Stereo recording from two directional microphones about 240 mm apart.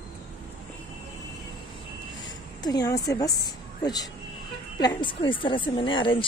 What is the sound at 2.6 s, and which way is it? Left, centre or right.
Speech, centre.